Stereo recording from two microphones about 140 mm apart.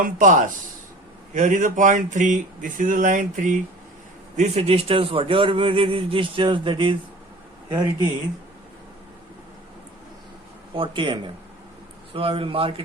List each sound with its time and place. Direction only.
0.0 s speech: 70° right (ahead or behind)
4.4 s a man's voice: 50° right (ahead or behind); by 8.0 s 30° right (ahead or behind)
10.8 s a man's voice: 35° right (ahead or behind)